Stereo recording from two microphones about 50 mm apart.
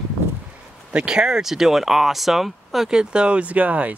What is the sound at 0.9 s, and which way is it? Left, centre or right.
Speech, centre.